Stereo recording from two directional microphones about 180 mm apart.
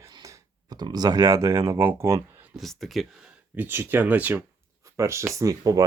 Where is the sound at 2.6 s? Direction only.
Centre (ahead or behind).